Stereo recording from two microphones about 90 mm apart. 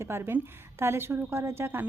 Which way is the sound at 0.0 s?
25° right (ahead or behind).